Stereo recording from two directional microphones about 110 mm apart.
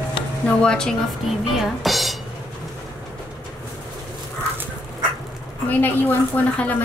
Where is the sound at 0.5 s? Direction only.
5° left (ahead or behind).